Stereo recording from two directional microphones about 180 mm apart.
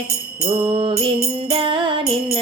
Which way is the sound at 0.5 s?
30° right (ahead or behind).